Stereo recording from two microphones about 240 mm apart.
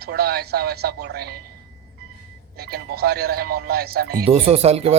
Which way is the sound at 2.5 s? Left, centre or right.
Right.